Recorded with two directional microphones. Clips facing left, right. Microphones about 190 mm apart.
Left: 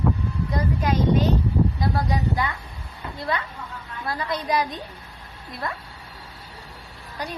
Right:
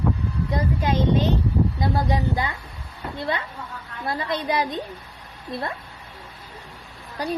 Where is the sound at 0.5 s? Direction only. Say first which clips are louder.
Even; 25° right (ahead or behind).